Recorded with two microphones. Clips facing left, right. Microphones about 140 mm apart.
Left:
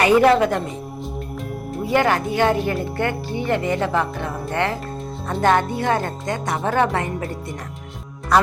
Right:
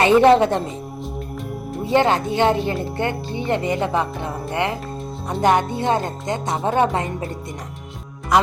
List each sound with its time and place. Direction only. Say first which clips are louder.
0.0 s speech: right 2 dB; 25° right (ahead or behind)
1.8 s speech: right 1 dB; 25° right (ahead or behind)